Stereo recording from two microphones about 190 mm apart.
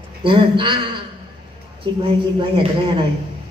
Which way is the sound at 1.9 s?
25° right (ahead or behind).